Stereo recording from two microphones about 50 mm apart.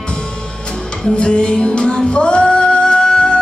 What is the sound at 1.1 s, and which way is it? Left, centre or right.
Music, centre.